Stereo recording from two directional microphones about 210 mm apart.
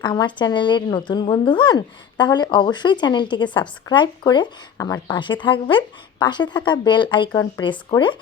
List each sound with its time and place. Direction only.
0.0 s a woman's voice: 20° left (ahead or behind)